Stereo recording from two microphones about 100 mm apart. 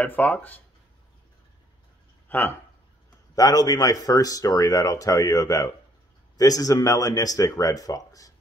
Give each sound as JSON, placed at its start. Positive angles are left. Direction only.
{"t": 0.0, "sound": "speech", "side_deg": 15}
{"t": 2.2, "sound": "a sound", "side_deg": 20}
{"t": 3.3, "sound": "speech", "side_deg": 40}